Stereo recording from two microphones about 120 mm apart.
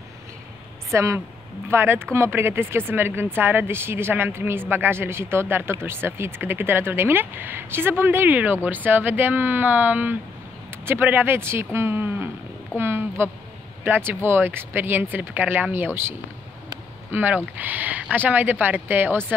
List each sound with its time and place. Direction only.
0.8 s a woman's voice: 25° right (ahead or behind)